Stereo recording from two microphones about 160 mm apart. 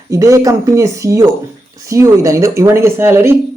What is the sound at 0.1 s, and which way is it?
Speech, 20° right (ahead or behind).